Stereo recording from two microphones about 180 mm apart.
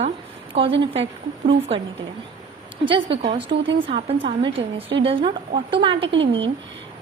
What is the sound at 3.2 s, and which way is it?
A woman's voice, 35° right (ahead or behind).